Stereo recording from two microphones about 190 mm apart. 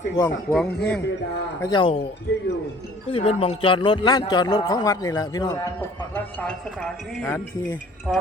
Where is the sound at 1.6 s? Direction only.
25° left (ahead or behind).